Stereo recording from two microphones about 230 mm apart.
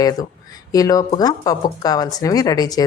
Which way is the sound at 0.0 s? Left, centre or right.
Centre.